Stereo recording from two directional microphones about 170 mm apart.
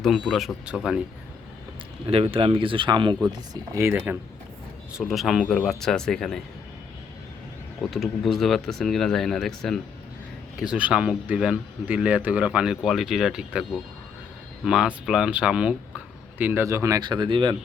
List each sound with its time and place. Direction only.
0.0 s speech: centre (ahead or behind)
2.0 s speech: 35° right (ahead or behind); by 4.2 s 10° right (ahead or behind)
4.9 s speech: centre (ahead or behind)
7.8 s speech: centre (ahead or behind); by 17.6 s 30° right (ahead or behind)